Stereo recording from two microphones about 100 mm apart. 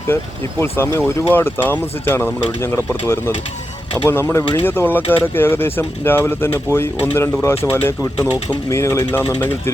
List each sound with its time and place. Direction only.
0.6 s speech: 25° left (ahead or behind)